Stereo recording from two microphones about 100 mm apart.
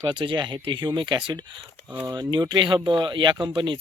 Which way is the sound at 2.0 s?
35° right (ahead or behind).